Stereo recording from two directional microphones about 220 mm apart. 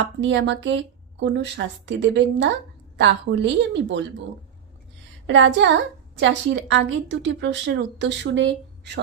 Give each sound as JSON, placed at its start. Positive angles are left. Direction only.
{"t": 0.0, "sound": "a woman's voice", "side_deg": -55}
{"t": 5.2, "sound": "a woman's voice", "side_deg": -55}